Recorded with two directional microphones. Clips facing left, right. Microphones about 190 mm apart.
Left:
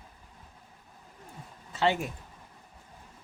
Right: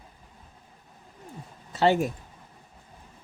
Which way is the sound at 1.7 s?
40° right (ahead or behind).